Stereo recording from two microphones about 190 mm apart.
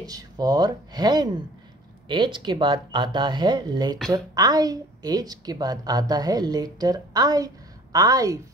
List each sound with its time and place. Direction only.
0.0 s a woman's voice: 20° right (ahead or behind)